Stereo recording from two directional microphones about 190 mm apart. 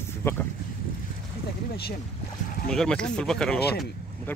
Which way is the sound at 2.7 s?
5° left (ahead or behind).